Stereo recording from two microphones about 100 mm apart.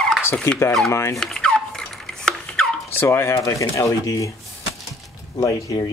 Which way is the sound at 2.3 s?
5° left (ahead or behind).